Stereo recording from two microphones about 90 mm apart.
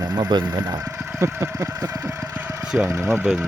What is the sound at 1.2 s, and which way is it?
Vehicle, 35° right (ahead or behind).